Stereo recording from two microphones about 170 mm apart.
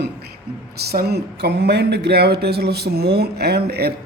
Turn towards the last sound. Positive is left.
turn(degrees=-70)  # may be behind; listen again after turning